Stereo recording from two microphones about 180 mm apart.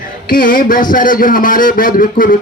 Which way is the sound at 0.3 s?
50° left (ahead or behind).